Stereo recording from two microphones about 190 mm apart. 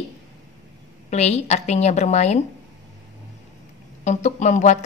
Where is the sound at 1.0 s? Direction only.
35° left (ahead or behind).